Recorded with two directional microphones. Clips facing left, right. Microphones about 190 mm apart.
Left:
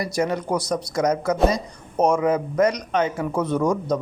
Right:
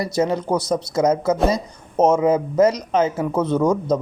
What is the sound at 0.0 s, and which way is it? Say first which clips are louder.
Speech: right 3 dB; 25° right (ahead or behind).